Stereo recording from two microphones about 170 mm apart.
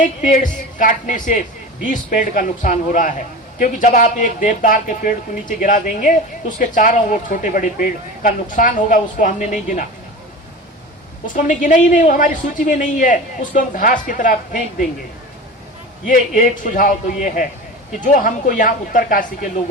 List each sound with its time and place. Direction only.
0.0 s a man's voice: 50° left (ahead or behind)
11.3 s a man's voice: 50° left (ahead or behind)
16.0 s a man's voice: 50° left (ahead or behind)
18.0 s a man's voice: 50° left (ahead or behind)